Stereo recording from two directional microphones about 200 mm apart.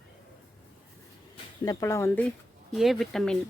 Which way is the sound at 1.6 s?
15° left (ahead or behind).